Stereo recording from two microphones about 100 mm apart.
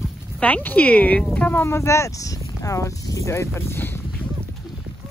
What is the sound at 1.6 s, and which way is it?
Speech, 30° left (ahead or behind).